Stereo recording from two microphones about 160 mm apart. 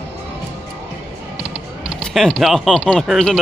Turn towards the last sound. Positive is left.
turn(degrees=0)  # may be behind; listen again after turning